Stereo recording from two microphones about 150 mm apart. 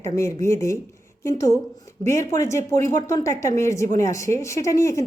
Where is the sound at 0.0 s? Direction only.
20° left (ahead or behind).